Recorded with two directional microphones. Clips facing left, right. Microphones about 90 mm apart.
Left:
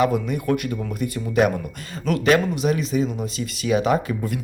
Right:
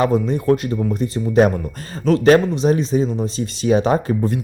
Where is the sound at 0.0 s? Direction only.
30° right (ahead or behind).